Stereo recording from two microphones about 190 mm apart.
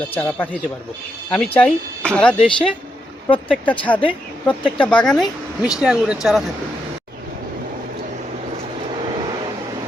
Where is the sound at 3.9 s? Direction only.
5° left (ahead or behind).